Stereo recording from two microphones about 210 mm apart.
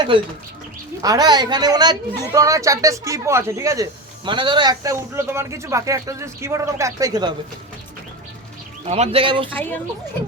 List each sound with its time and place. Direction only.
0.1 s a man's voice: 25° right (ahead or behind)
8.9 s speech: 30° right (ahead or behind)
9.5 s speech: 10° left (ahead or behind)